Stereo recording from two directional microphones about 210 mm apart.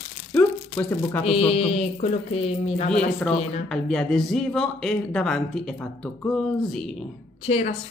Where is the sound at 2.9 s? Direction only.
5° left (ahead or behind).